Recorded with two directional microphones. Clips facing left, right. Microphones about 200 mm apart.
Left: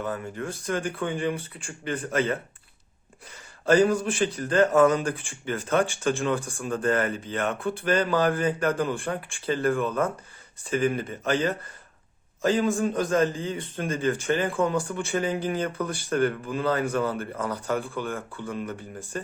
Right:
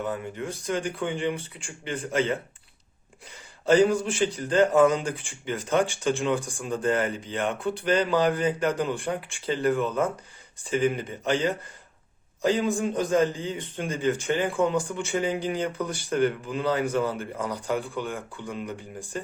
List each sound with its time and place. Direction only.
0.0 s speech: 20° right (ahead or behind)
4.2 s a man's voice: 15° right (ahead or behind)
12.4 s a man's voice: 15° right (ahead or behind)